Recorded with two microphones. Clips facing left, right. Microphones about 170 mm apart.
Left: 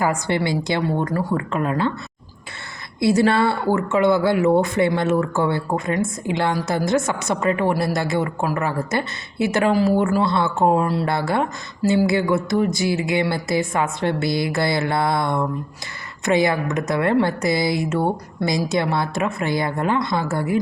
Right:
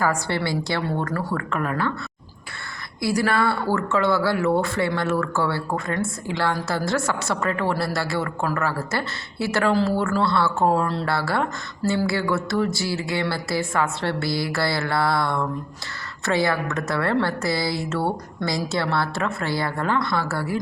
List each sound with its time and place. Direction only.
0.0 s a woman's voice: 20° left (ahead or behind)
3.0 s a woman's voice: 25° left (ahead or behind)